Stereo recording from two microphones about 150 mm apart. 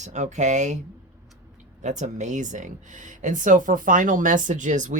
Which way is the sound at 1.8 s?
50° right (ahead or behind).